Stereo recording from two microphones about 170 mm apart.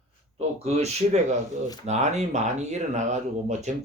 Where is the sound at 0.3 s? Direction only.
40° right (ahead or behind).